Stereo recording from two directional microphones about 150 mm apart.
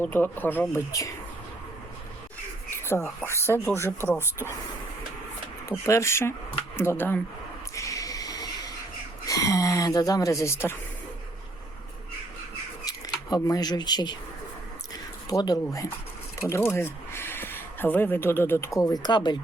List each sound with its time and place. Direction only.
0.0 s speech: 10° left (ahead or behind)
2.6 s speech: 15° left (ahead or behind)
5.6 s speech: 20° left (ahead or behind)
7.8 s a sound: 20° left (ahead or behind)
9.2 s speech: 20° left (ahead or behind)
13.3 s speech: 25° left (ahead or behind)
15.3 s speech: 25° left (ahead or behind)